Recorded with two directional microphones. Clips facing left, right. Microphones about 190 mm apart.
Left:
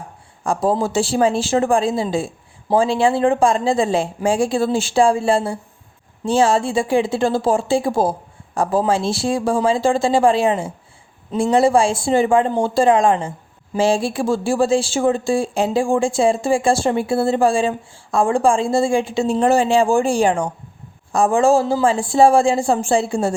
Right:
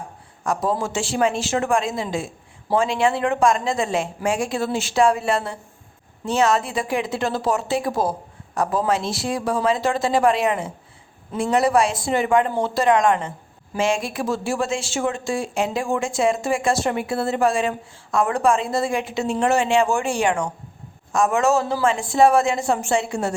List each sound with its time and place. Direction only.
0.4 s speech: 30° left (ahead or behind)